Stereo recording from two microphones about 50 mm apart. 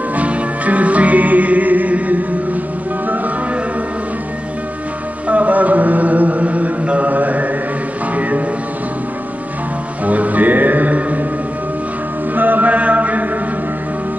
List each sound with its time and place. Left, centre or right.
0.1 s music: right
5.3 s chant: right
8.2 s music: right
10.0 s music: right
12.4 s chant: right